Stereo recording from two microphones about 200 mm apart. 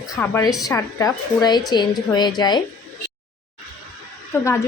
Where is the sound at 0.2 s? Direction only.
10° left (ahead or behind).